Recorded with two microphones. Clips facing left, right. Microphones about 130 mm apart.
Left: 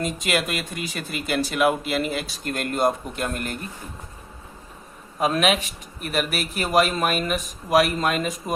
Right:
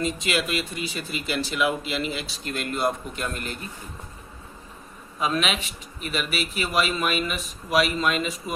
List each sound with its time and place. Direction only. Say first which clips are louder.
0.0 s speech: left 1 dB; 50° left (ahead or behind)
5.2 s speech: left 5 dB; 50° left (ahead or behind)